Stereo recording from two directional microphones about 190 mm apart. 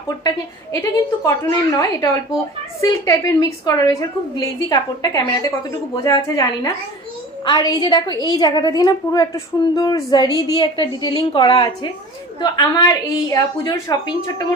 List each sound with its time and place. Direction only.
0.7 s a woman's voice: 15° left (ahead or behind)